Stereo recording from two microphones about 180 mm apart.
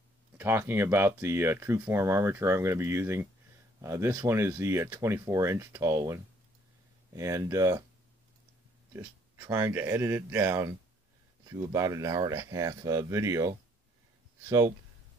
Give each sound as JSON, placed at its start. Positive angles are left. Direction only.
{"t": 0.4, "sound": "speech", "side_deg": -10}
{"t": 8.9, "sound": "speech", "side_deg": -15}